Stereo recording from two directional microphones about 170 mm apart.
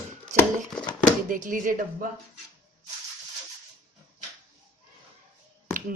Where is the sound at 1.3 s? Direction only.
50° right (ahead or behind).